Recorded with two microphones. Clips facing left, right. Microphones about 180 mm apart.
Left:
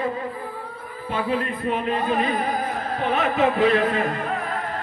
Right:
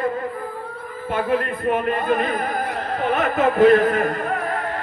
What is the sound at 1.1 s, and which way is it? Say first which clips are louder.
Speech: right 3 dB; 50° right (ahead or behind).